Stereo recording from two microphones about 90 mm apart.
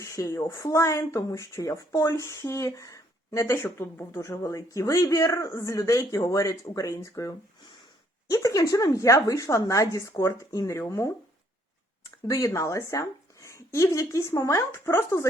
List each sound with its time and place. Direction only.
0.0 s speech: 35° left (ahead or behind)
12.5 s a woman's voice: 35° left (ahead or behind)